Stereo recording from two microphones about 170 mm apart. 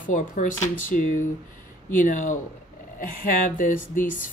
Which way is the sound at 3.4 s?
50° left (ahead or behind).